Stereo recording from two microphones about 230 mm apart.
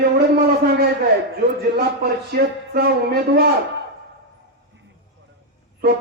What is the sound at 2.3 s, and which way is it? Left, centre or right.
Speech, right.